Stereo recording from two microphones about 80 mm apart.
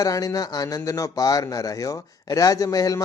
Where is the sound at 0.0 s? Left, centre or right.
Left.